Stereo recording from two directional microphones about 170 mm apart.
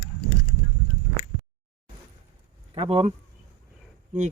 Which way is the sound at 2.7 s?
35° right (ahead or behind).